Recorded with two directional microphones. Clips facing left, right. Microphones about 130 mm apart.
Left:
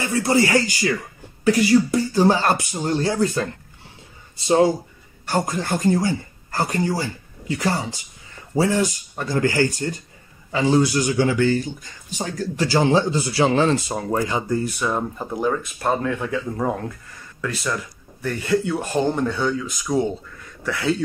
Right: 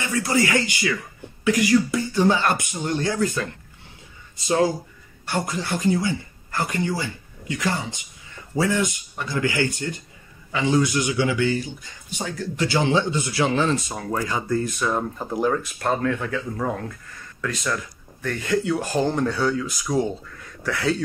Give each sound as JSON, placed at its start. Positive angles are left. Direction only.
{"t": 0.0, "sound": "speech", "side_deg": 30}
{"t": 5.2, "sound": "speech", "side_deg": 40}
{"t": 9.1, "sound": "speech", "side_deg": 45}
{"t": 14.6, "sound": "speech", "side_deg": 10}
{"t": 15.8, "sound": "speech", "side_deg": 10}
{"t": 17.4, "sound": "speech", "side_deg": 5}